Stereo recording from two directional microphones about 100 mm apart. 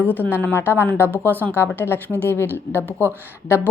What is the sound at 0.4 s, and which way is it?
A woman's voice, 20° left (ahead or behind).